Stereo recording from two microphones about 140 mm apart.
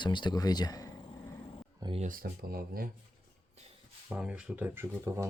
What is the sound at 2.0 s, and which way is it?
Speech, 85° right.